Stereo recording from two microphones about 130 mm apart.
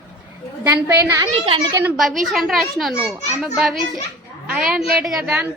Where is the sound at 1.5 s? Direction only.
40° right (ahead or behind).